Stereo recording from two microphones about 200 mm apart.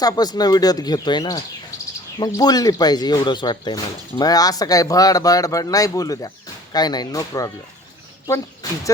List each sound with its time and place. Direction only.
0.0 s speech: 20° left (ahead or behind)